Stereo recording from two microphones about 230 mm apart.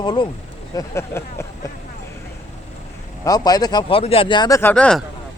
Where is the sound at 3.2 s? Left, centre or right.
Centre.